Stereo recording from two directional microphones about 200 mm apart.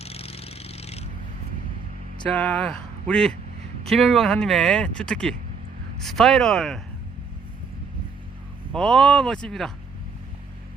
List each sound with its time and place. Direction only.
0.0 s vehicle: 30° left (ahead or behind)
2.2 s speech: 5° left (ahead or behind)
8.7 s speech: centre (ahead or behind)